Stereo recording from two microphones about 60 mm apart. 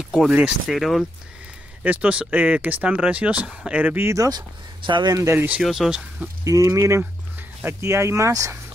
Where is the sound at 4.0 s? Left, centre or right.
Right.